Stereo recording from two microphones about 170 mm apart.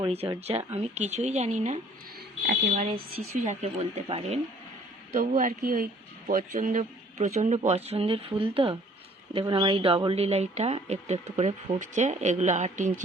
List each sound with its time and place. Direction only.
0.0 s a woman's voice: 35° right (ahead or behind)